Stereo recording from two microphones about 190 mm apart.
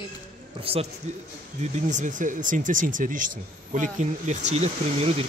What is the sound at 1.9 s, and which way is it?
Speech, 40° right (ahead or behind).